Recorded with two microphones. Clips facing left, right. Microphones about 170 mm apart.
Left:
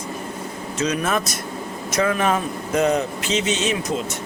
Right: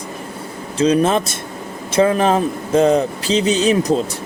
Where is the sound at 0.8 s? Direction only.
30° right (ahead or behind).